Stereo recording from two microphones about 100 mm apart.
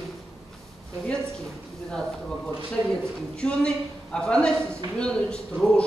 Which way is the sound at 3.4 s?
10° left (ahead or behind).